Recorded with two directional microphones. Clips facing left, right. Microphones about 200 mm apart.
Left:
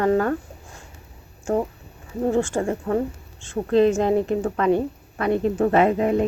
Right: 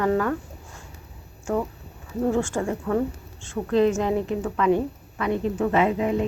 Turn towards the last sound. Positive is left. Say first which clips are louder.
# left 3 dB
turn(degrees=50)  # may be behind; listen again after turning